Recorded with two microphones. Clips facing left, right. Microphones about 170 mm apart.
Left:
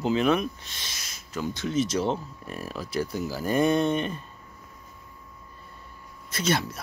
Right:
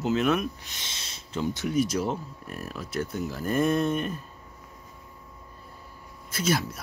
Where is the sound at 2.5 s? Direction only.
Centre (ahead or behind).